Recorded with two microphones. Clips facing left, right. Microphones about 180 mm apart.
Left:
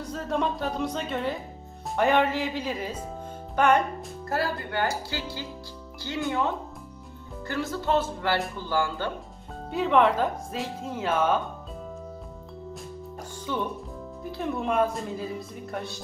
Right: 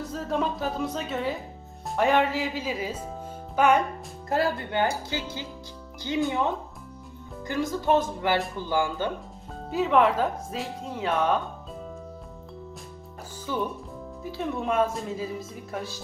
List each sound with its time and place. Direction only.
0.0 s speech: centre (ahead or behind)
4.3 s speech: 20° right (ahead or behind)
9.6 s speech: centre (ahead or behind)
13.4 s speech: 5° right (ahead or behind)